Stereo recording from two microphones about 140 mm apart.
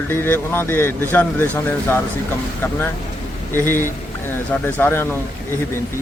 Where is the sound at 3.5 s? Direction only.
15° left (ahead or behind).